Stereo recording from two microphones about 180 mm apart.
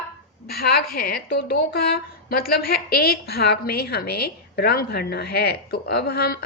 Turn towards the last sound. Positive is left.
turn(degrees=60)  # may be behind; listen again after turning